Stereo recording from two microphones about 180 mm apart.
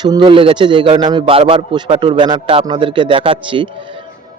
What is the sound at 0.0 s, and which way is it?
A man's voice, 25° right (ahead or behind).